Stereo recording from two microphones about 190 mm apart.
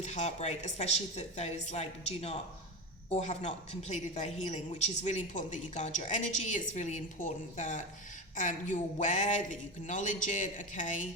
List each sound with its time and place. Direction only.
0.0 s a woman's voice: 35° left (ahead or behind)